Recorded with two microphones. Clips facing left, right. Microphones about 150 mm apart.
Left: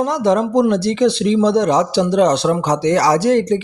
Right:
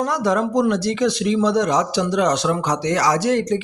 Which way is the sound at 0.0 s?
25° left (ahead or behind).